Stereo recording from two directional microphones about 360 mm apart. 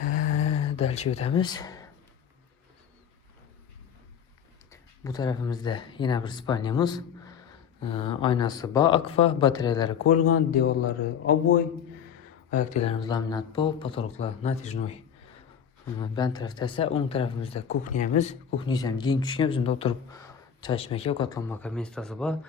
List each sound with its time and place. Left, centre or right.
0.0 s a sound: left
1.1 s speech: centre
4.7 s speech: centre
10.2 s a man's voice: left
10.5 s speech: left
10.8 s speech: left
12.8 s speech: centre
16.0 s speech: centre